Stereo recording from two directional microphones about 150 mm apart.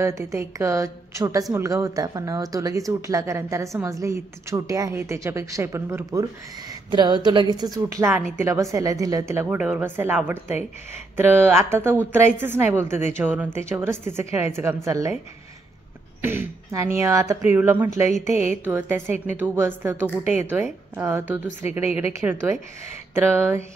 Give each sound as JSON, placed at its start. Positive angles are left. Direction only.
{"t": 0.0, "sound": "speech", "side_deg": -20}
{"t": 6.9, "sound": "a woman's voice", "side_deg": -30}
{"t": 16.2, "sound": "a woman's voice", "side_deg": -15}
{"t": 18.1, "sound": "speech", "side_deg": 50}
{"t": 18.6, "sound": "a woman's voice", "side_deg": -10}
{"t": 19.0, "sound": "speech", "side_deg": 50}
{"t": 19.4, "sound": "a woman's voice", "side_deg": -15}